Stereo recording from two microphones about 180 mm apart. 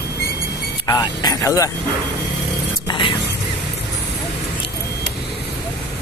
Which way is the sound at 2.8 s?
25° left (ahead or behind).